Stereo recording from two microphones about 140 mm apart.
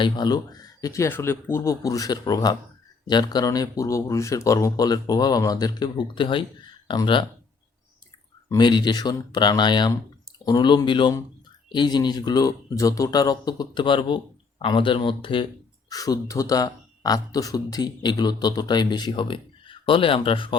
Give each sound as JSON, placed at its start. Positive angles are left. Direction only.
{"t": 0.0, "sound": "speech", "side_deg": 30}
{"t": 8.4, "sound": "speech", "side_deg": 30}
{"t": 15.9, "sound": "speech", "side_deg": 25}